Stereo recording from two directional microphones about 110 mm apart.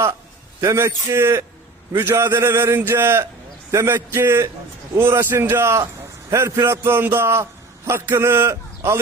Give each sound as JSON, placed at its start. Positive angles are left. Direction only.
{"t": 0.6, "sound": "a man's voice", "side_deg": -25}